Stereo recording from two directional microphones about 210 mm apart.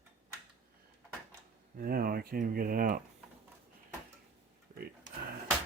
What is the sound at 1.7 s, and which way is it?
Speech, 45° right (ahead or behind).